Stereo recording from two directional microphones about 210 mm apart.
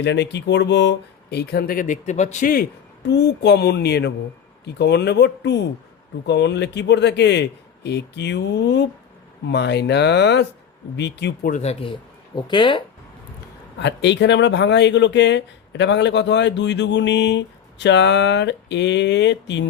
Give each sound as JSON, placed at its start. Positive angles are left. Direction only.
{"t": 0.0, "sound": "speech", "side_deg": 55}
{"t": 3.1, "sound": "speech", "side_deg": 55}
{"t": 11.5, "sound": "speech", "side_deg": 30}
{"t": 13.7, "sound": "speech", "side_deg": 55}